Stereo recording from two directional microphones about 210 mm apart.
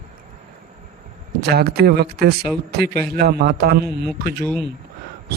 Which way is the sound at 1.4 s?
50° right (ahead or behind).